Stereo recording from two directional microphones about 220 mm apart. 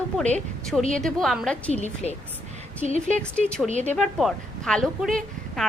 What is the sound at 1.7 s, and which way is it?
Speech, 30° left (ahead or behind).